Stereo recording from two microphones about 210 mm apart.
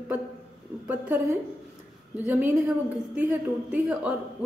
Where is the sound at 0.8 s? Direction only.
10° right (ahead or behind).